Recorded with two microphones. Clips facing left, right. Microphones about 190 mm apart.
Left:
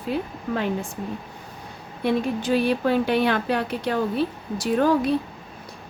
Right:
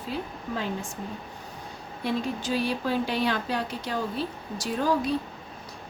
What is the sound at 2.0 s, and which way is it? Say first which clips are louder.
Speech: left 6 dB; 60° left (ahead or behind).